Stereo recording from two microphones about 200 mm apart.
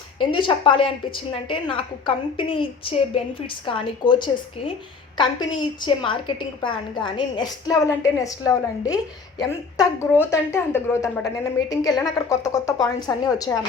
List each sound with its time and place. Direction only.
0.2 s a woman's voice: 25° left (ahead or behind)